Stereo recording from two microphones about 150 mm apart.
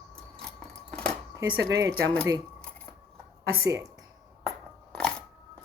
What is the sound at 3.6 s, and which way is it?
Speech, 20° right (ahead or behind).